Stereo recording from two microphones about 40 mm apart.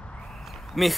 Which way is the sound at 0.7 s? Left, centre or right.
Centre.